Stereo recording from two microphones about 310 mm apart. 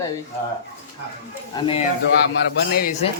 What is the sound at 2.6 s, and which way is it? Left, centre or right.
Speech, left.